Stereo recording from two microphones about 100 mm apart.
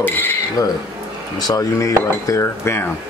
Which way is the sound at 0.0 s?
20° left (ahead or behind).